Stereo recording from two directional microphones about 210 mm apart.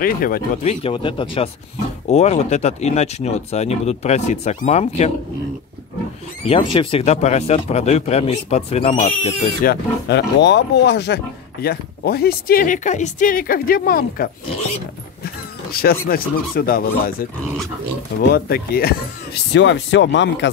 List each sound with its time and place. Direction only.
0.0 s speech: 45° left (ahead or behind)
0.7 s speech: 25° left (ahead or behind)
6.4 s speech: 25° left (ahead or behind)
9.7 s speech: 50° left (ahead or behind)
18.3 s speech: 45° left (ahead or behind)